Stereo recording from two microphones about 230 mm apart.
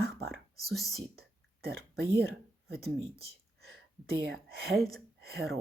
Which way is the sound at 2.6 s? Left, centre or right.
Right.